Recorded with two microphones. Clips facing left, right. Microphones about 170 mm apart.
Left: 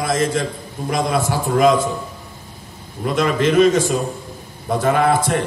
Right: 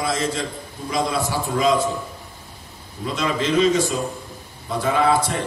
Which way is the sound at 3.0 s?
55° left (ahead or behind).